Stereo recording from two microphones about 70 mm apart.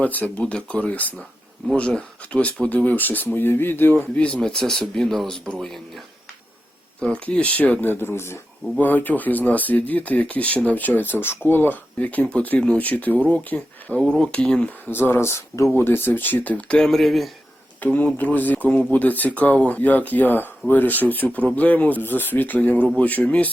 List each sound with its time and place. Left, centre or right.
0.0 s speech: left
4.1 s speech: centre
7.0 s speech: centre; by 8.4 s left
8.8 s speech: left; by 14.7 s centre
14.8 s speech: left
15.7 s speech: left; by 17.3 s centre
17.7 s speech: left